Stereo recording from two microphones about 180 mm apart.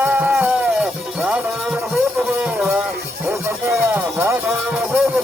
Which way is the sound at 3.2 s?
15° right (ahead or behind).